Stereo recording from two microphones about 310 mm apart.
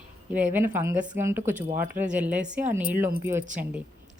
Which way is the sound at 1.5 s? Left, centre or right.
Right.